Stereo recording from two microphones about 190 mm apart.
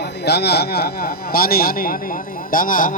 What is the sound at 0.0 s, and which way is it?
A man's voice, 60° left (ahead or behind).